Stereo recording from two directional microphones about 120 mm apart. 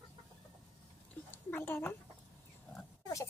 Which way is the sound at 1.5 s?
15° left (ahead or behind).